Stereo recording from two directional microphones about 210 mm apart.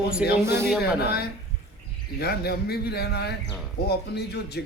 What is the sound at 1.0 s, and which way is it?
A man's voice, 50° left (ahead or behind).